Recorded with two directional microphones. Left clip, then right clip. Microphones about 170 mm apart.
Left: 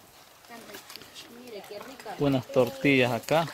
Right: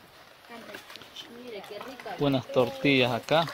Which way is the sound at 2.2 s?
30° left (ahead or behind).